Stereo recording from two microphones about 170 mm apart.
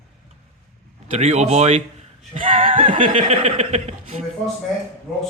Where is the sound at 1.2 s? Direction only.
40° right (ahead or behind).